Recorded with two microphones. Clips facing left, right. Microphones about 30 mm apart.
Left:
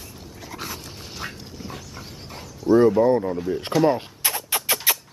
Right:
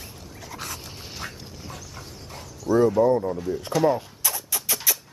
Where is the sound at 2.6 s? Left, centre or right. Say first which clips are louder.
Left 3 dB; left.